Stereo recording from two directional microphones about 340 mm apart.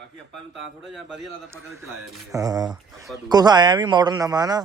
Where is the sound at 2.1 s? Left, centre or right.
Centre.